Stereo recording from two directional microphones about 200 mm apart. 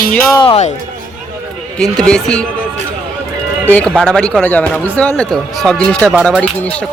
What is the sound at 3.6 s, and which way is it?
Speech, 5° left (ahead or behind).